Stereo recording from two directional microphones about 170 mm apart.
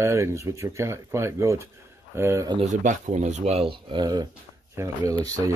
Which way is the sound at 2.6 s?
45° right (ahead or behind).